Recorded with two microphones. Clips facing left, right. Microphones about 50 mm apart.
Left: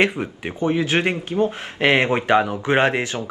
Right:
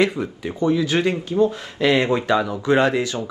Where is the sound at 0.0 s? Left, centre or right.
Left.